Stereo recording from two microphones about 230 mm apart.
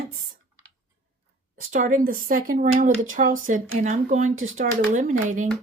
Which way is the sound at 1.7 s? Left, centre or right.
Right.